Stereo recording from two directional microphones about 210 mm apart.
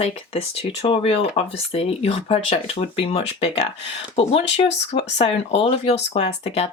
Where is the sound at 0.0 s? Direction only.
30° left (ahead or behind).